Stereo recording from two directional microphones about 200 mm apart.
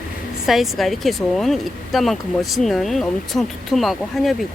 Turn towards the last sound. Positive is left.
turn(degrees=0)  # may be behind; listen again after turning